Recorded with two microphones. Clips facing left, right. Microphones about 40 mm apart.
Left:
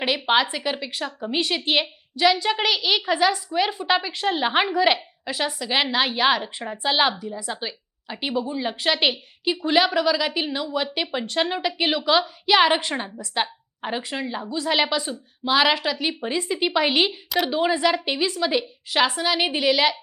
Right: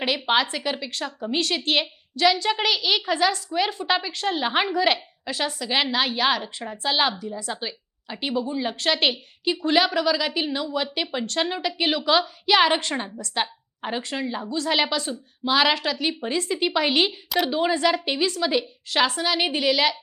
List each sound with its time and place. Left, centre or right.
0.0 s a woman's voice: centre